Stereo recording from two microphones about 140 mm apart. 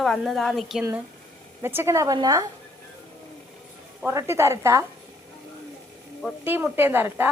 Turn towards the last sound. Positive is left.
turn(degrees=-15)  # may be behind; listen again after turning